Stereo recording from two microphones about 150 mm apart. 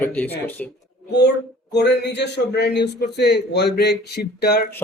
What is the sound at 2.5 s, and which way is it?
A man's voice, 90° left.